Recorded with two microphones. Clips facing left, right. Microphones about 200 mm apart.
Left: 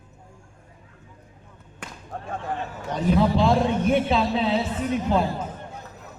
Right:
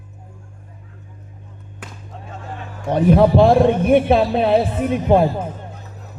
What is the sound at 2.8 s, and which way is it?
Speech, 55° right (ahead or behind).